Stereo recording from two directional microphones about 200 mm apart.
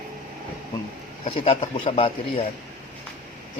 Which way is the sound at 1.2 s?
30° left (ahead or behind).